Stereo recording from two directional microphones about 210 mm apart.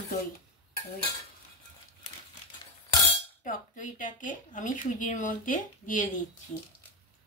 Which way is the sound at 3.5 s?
40° left (ahead or behind).